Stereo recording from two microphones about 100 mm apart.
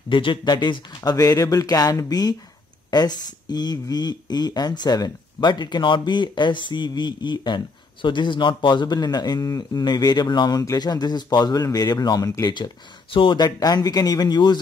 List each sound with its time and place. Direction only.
0.1 s speech: 55° left (ahead or behind); by 12.5 s 35° left (ahead or behind)
12.5 s speech: 55° left (ahead or behind)
13.4 s speech: 40° left (ahead or behind)